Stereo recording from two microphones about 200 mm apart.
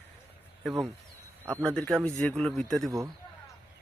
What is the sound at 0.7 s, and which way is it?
A man's voice, centre (ahead or behind).